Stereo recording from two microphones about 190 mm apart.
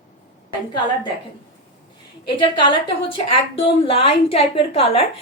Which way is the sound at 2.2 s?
25° left (ahead or behind).